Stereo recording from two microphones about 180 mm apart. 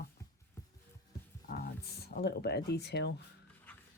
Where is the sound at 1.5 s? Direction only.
60° left (ahead or behind).